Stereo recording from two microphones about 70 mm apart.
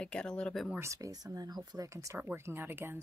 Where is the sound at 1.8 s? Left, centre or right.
Right.